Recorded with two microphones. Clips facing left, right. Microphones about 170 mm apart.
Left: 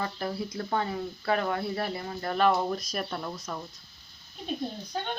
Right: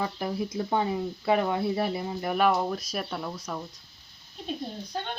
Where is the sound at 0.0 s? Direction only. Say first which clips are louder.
Right 2 dB; 10° right (ahead or behind).